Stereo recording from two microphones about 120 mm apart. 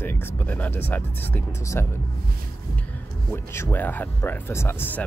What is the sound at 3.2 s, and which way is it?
Speech, 20° left (ahead or behind).